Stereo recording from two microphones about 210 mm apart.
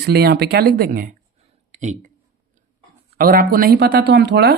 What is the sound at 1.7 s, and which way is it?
Speech, 35° right (ahead or behind).